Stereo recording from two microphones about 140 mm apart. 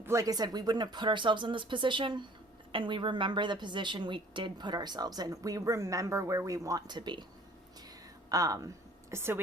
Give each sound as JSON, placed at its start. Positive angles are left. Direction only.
{"t": 0.0, "sound": "a woman's voice", "side_deg": -20}
{"t": 8.3, "sound": "a woman's voice", "side_deg": -25}